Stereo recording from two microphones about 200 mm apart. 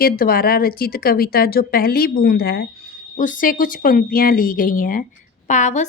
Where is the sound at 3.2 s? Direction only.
40° left (ahead or behind).